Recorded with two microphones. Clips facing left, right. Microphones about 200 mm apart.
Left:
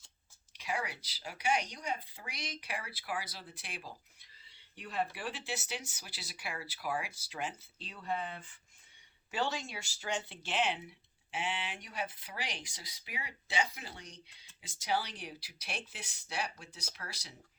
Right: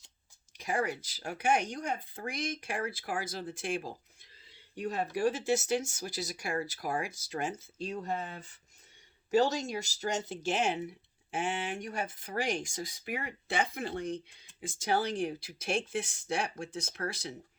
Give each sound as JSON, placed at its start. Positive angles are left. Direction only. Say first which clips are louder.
{"t": 0.5, "sound": "speech", "louder": "right 6 dB", "side_deg": -45}